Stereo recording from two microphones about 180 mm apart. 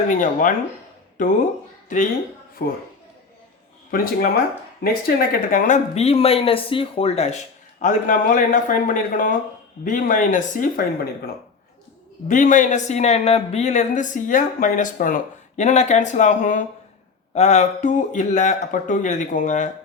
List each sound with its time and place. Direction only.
0.2 s speech: 45° left (ahead or behind)
3.9 s speech: 50° left (ahead or behind)
12.3 s speech: 45° left (ahead or behind)